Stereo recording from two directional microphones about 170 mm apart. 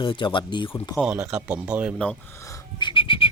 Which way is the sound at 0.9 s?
5° right (ahead or behind).